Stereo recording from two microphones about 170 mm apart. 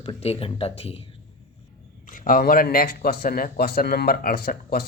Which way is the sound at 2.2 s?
60° left (ahead or behind).